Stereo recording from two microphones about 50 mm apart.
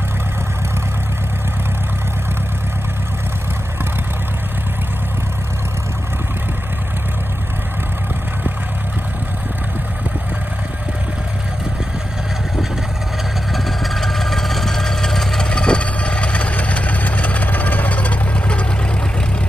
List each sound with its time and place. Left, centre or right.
13.5 s vehicle: centre
15.5 s vehicle: left